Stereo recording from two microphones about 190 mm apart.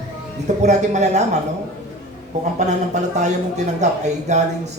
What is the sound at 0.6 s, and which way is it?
Speech, 35° right (ahead or behind).